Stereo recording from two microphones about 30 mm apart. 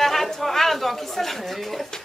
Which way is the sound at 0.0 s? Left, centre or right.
Centre.